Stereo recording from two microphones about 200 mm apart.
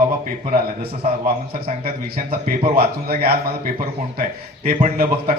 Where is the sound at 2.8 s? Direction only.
50° right (ahead or behind).